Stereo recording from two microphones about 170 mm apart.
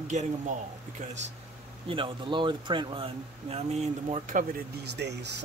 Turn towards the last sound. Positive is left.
turn(degrees=-80)